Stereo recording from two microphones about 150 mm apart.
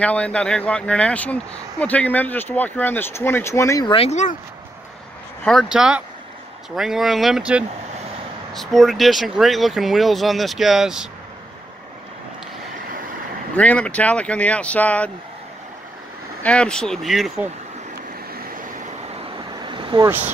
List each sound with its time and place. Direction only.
0.0 s speech: 10° left (ahead or behind)
3.8 s speech: 40° left (ahead or behind)
5.4 s speech: centre (ahead or behind)
13.6 s speech: 10° left (ahead or behind)
16.4 s speech: 5° left (ahead or behind)
19.6 s vehicle: 35° right (ahead or behind)